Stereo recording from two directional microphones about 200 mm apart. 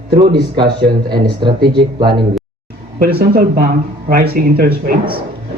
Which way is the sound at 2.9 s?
50° right (ahead or behind).